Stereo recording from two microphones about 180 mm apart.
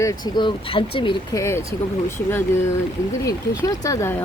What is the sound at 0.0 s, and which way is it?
Speech, 20° left (ahead or behind).